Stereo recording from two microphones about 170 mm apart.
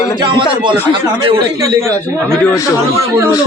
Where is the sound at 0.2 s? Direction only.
30° right (ahead or behind).